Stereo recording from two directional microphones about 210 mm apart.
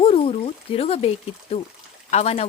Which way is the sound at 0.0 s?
25° left (ahead or behind).